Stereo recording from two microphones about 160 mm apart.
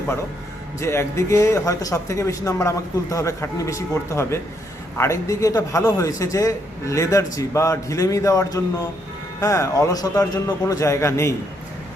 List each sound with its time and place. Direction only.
0.8 s speech: 15° left (ahead or behind)